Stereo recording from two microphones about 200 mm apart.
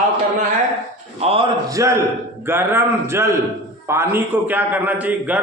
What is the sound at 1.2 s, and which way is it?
Speech, 30° right (ahead or behind).